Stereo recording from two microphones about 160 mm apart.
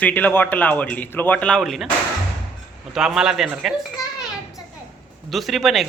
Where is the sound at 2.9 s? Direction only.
5° right (ahead or behind).